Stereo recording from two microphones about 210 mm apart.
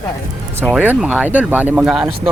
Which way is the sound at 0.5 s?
5° right (ahead or behind).